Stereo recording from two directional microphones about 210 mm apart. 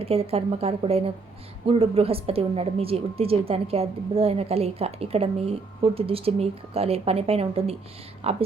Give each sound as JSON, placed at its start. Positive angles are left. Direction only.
{"t": 0.0, "sound": "a woman's voice", "side_deg": -30}